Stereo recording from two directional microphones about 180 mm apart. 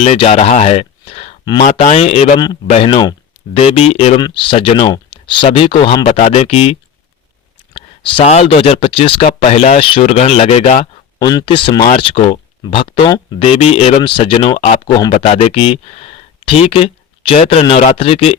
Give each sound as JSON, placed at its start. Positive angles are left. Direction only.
{"t": 0.0, "sound": "speech", "side_deg": 35}
{"t": 11.2, "sound": "speech", "side_deg": 20}